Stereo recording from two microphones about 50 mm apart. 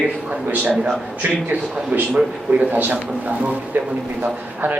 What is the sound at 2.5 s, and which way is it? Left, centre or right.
A man's voice, right.